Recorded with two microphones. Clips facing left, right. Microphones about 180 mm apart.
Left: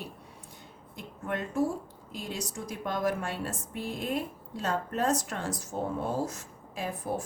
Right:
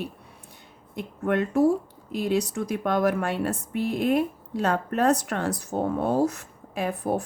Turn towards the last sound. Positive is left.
turn(degrees=-65)  # may be behind; listen again after turning